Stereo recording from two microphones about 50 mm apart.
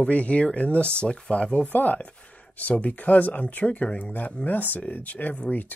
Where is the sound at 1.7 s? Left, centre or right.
Left.